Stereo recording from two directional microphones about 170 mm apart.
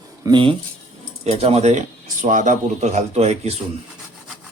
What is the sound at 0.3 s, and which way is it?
Speech, 30° right (ahead or behind).